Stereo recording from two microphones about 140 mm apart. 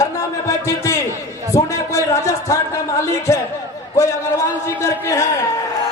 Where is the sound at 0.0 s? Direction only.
25° left (ahead or behind).